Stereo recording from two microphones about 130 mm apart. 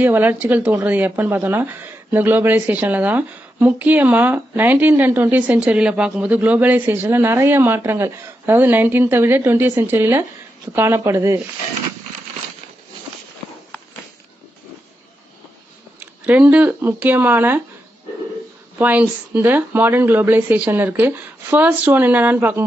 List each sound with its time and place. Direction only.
0.0 s speech: 15° right (ahead or behind)
16.0 s speech: 10° right (ahead or behind)
18.8 s speech: 10° right (ahead or behind)